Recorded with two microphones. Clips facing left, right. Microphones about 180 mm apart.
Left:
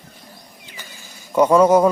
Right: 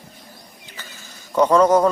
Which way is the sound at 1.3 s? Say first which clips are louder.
Left 2 dB; 10° left (ahead or behind).